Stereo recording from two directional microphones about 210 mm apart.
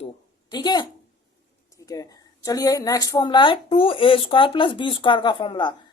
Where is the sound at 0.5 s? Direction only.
20° left (ahead or behind).